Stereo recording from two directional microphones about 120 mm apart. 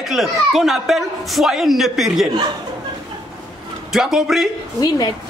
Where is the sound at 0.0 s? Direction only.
Centre (ahead or behind).